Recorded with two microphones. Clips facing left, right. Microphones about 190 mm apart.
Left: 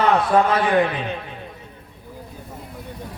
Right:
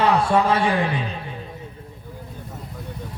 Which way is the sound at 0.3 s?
30° right (ahead or behind).